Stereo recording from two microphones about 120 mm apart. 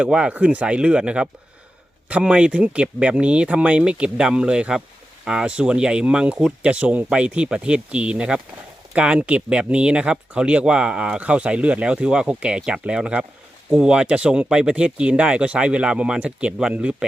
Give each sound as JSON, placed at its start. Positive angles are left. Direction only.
{"t": 0.0, "sound": "speech", "side_deg": -10}